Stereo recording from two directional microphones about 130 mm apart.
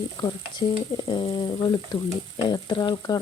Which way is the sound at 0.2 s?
35° left (ahead or behind).